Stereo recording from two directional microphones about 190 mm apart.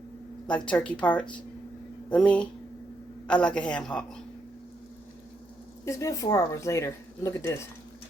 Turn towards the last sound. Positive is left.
turn(degrees=15)  # may be behind; listen again after turning